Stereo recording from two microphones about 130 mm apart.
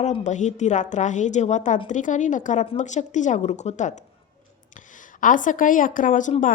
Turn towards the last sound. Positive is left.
turn(degrees=80)